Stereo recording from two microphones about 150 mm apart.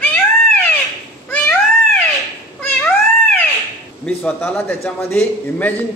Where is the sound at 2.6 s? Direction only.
10° left (ahead or behind).